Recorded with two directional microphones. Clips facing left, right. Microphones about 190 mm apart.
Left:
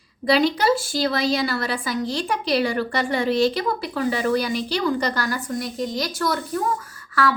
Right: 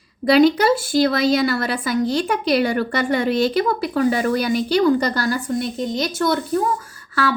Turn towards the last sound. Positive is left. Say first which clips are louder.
# even
turn(degrees=-30)  # may be behind; listen again after turning